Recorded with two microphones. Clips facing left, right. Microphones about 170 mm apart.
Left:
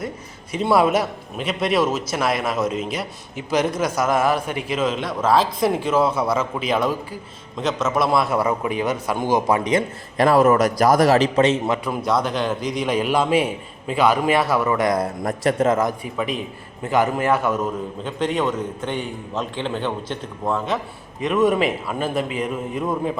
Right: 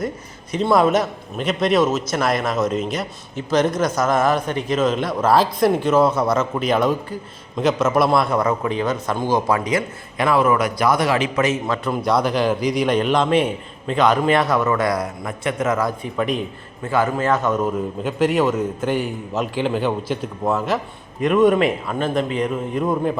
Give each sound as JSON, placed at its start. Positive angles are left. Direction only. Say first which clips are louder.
{"t": 0.5, "sound": "a man's voice", "louder": "right 1 dB", "side_deg": 5}
{"t": 10.2, "sound": "a man's voice", "louder": "left 2 dB", "side_deg": 40}
{"t": 12.0, "sound": "a man's voice", "louder": "right 3 dB", "side_deg": 0}
{"t": 14.9, "sound": "a man's voice", "louder": "left 3 dB", "side_deg": 40}
{"t": 16.1, "sound": "a man's voice", "louder": "right 3 dB", "side_deg": 0}
{"t": 16.8, "sound": "a man's voice", "louder": "even", "side_deg": 15}
{"t": 17.6, "sound": "a man's voice", "louder": "right 4 dB", "side_deg": -5}